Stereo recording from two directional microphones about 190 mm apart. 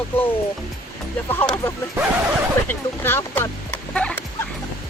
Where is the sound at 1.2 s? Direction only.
10° left (ahead or behind).